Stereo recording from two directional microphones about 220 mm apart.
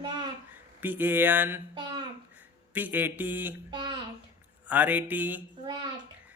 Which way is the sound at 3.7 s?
20° right (ahead or behind).